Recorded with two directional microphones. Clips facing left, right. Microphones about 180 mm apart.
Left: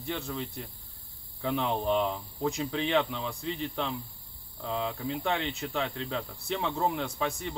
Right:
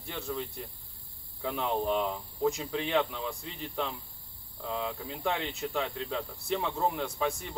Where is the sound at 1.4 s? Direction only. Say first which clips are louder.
Left 1 dB; 5° right (ahead or behind).